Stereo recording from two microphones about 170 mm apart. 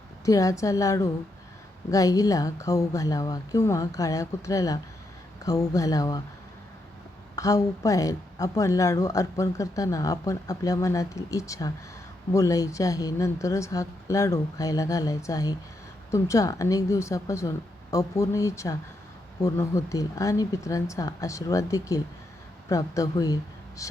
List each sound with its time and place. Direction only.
0.3 s speech: 20° left (ahead or behind)
7.3 s speech: 20° left (ahead or behind)